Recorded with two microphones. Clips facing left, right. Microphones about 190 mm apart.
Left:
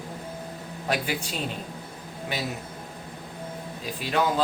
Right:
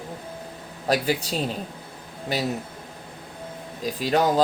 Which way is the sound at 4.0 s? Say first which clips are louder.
Right 4 dB; 40° right (ahead or behind).